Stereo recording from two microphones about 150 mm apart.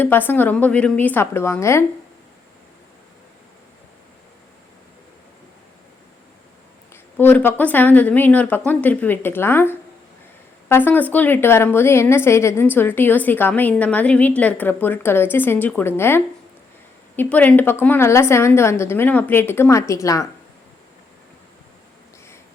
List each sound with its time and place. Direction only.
0.0 s a woman's voice: 15° left (ahead or behind)
6.9 s a woman's voice: 10° left (ahead or behind)